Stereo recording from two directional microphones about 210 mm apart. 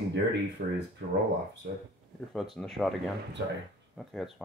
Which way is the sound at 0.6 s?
40° right (ahead or behind).